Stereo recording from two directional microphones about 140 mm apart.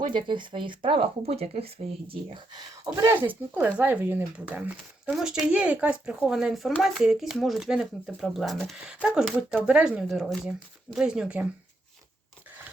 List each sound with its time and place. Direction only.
0.0 s speech: 35° right (ahead or behind)
2.9 s speech: 20° right (ahead or behind)